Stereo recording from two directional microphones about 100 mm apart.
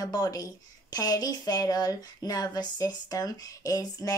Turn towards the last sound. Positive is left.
turn(degrees=40)  # may be behind; listen again after turning